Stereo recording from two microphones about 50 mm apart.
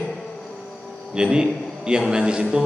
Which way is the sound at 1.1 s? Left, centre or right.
Centre.